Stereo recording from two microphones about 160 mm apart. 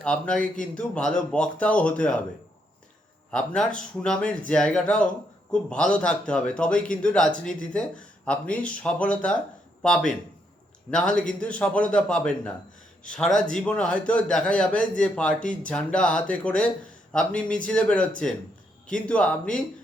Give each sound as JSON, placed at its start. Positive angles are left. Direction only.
{"t": 0.0, "sound": "a man's voice", "side_deg": 5}
{"t": 3.3, "sound": "a man's voice", "side_deg": 5}